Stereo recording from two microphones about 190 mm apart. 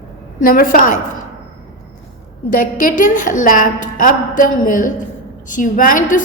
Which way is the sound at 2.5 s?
45° left (ahead or behind).